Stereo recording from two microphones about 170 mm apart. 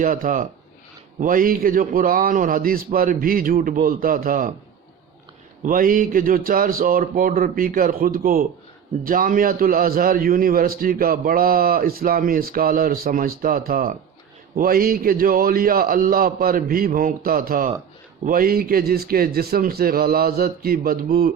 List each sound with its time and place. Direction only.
0.0 s a man's voice: 55° right (ahead or behind)
5.6 s a man's voice: 55° right (ahead or behind)